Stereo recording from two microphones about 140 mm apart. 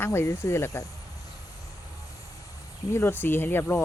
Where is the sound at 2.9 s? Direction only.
15° left (ahead or behind).